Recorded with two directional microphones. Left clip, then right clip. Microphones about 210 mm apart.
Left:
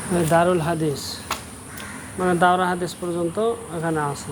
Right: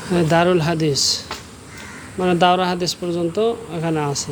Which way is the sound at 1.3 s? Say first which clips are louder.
Left 2 dB; 55° left (ahead or behind).